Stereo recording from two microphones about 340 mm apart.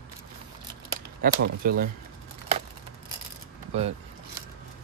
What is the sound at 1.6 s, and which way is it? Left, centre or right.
Speech, right.